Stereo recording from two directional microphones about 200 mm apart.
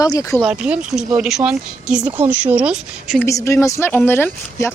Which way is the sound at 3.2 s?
15° left (ahead or behind).